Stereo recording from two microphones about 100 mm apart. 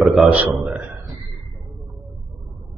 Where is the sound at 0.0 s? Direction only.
5° right (ahead or behind).